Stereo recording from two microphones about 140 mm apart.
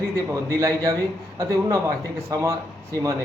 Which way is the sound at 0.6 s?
25° right (ahead or behind).